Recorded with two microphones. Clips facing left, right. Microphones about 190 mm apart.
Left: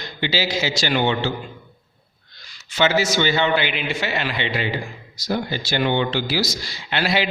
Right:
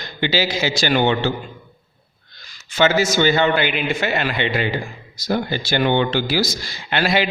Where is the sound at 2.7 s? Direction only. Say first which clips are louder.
Right 2 dB; 45° right (ahead or behind).